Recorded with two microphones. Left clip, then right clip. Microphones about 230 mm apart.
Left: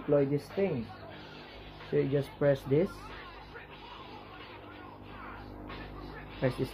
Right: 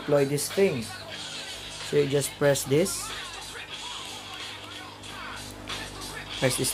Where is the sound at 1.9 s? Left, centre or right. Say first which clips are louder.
Right 5 dB; centre.